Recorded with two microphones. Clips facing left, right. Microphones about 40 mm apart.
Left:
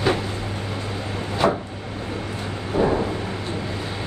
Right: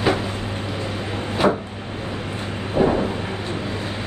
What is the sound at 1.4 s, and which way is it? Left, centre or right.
Vehicle, right.